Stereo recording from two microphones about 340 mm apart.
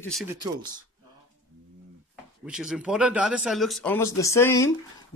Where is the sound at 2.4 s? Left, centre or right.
Centre.